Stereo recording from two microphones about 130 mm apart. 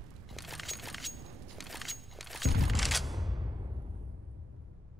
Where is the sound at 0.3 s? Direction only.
Centre (ahead or behind).